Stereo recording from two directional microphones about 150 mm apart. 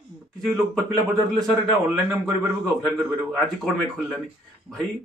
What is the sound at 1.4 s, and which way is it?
Speech, centre (ahead or behind).